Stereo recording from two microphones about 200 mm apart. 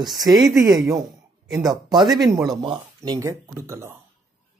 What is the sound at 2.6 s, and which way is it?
Speech, 20° right (ahead or behind).